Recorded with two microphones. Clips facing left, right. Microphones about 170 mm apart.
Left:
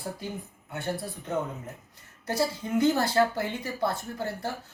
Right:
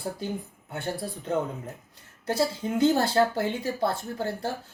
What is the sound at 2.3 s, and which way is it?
Speech, 30° right (ahead or behind).